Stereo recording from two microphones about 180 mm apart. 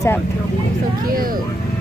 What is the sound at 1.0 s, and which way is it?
Speech, 55° right (ahead or behind).